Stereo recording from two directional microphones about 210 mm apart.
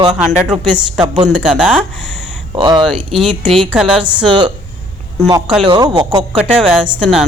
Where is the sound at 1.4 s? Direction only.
5° right (ahead or behind).